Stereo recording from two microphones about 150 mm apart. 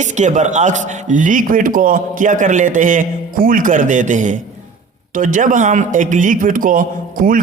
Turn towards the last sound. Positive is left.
turn(degrees=-65)  # may be behind; listen again after turning